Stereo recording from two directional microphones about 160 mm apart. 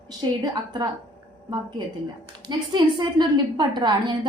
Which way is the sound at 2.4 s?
25° right (ahead or behind).